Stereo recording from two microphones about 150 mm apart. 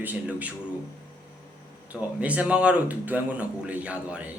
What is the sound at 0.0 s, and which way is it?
Speech, 10° right (ahead or behind).